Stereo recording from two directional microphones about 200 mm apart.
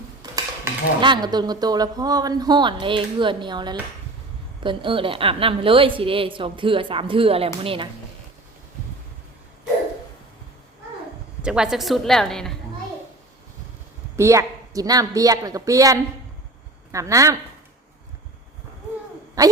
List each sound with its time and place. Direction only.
0.2 s a woman's voice: 20° right (ahead or behind)
11.4 s a woman's voice: 5° right (ahead or behind)
14.2 s speech: 15° right (ahead or behind)
19.4 s speech: 15° right (ahead or behind)